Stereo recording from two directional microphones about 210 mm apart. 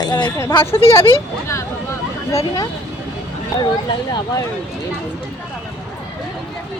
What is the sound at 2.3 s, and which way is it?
Speech, 20° left (ahead or behind).